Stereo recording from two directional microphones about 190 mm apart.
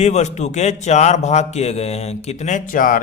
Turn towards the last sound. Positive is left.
turn(degrees=45)  # may be behind; listen again after turning